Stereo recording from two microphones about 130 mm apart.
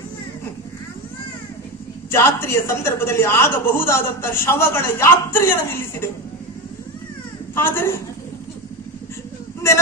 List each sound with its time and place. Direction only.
2.0 s a woman's voice: 20° left (ahead or behind)
7.5 s a woman's voice: 15° left (ahead or behind)